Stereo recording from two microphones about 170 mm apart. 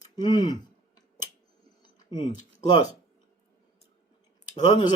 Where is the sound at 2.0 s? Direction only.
25° left (ahead or behind).